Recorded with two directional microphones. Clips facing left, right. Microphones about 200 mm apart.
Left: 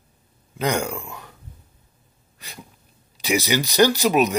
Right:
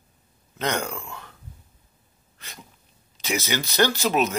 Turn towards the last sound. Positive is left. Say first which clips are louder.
# left 4 dB
turn(degrees=15)  # may be behind; listen again after turning